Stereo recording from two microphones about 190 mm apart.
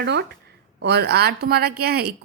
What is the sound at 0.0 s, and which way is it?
A woman's voice, 60° right (ahead or behind).